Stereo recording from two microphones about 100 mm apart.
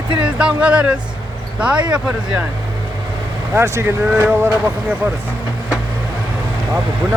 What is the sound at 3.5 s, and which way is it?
Speech, 25° right (ahead or behind).